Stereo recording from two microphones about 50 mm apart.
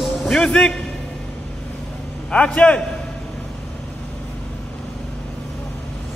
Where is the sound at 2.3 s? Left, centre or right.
Left.